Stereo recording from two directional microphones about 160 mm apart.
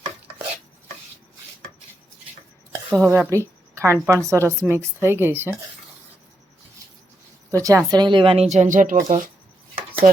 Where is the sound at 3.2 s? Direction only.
20° right (ahead or behind).